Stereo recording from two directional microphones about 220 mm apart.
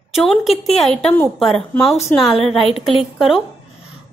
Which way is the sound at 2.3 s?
25° left (ahead or behind).